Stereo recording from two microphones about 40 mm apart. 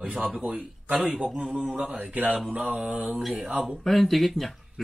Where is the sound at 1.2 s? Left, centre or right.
Centre.